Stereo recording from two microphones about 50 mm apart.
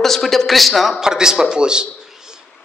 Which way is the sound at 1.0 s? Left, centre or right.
Centre.